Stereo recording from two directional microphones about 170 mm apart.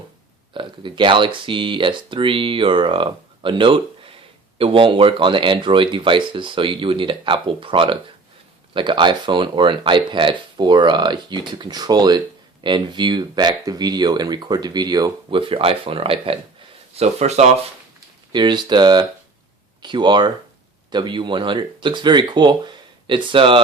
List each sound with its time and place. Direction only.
0.5 s speech: 30° right (ahead or behind)
18.3 s speech: 25° right (ahead or behind)